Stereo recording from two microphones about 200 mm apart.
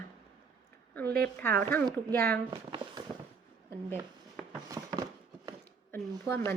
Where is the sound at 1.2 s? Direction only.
5° left (ahead or behind).